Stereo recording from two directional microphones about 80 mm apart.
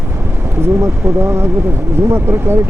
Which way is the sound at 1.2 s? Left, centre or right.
Right.